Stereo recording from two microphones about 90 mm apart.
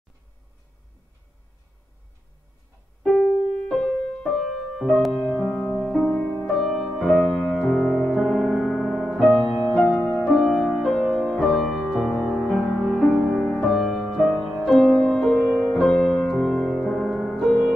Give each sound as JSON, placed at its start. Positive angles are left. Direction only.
{"t": 3.0, "sound": "music", "side_deg": 10}
{"t": 9.9, "sound": "music", "side_deg": 20}
{"t": 10.2, "sound": "music", "side_deg": 5}